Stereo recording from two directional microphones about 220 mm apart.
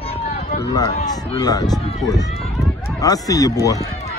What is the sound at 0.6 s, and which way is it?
Speech, 15° left (ahead or behind).